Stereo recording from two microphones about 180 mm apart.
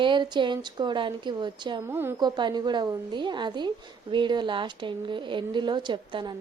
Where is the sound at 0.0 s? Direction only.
25° right (ahead or behind).